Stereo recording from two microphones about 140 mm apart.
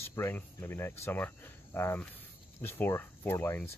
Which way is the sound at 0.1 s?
15° left (ahead or behind).